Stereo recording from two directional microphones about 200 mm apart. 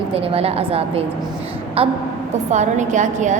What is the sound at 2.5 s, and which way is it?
Speech, 35° right (ahead or behind).